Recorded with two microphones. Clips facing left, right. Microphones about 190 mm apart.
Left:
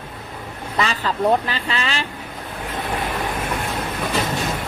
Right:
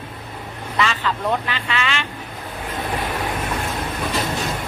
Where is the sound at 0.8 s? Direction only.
35° left (ahead or behind).